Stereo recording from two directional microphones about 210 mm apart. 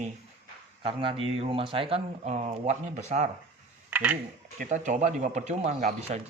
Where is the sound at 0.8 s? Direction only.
25° right (ahead or behind).